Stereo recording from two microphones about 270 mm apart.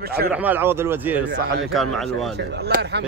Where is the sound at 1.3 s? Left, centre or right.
Right.